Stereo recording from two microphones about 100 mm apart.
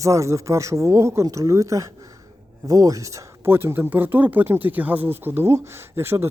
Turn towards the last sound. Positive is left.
turn(degrees=-25)  # may be behind; listen again after turning